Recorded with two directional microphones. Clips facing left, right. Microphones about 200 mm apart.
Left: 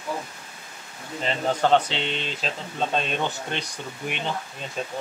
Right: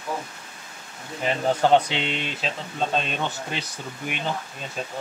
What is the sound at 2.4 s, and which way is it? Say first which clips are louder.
Speech: right 1 dB; centre (ahead or behind).